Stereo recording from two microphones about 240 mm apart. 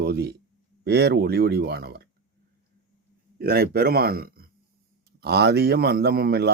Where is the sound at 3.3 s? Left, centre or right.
Right.